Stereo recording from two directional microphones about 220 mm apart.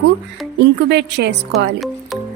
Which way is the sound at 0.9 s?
50° right (ahead or behind).